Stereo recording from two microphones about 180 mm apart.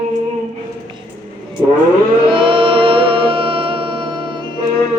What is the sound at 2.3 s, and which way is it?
Music, 30° right (ahead or behind).